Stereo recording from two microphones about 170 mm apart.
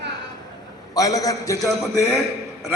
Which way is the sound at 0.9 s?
20° left (ahead or behind).